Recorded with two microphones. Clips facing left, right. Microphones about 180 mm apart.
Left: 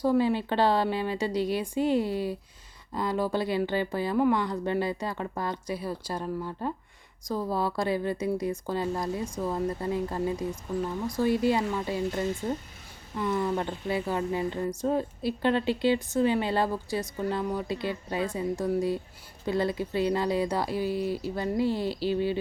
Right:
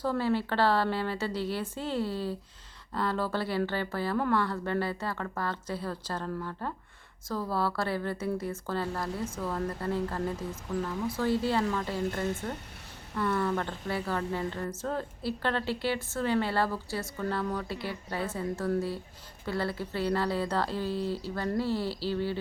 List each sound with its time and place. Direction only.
0.0 s speech: 15° left (ahead or behind)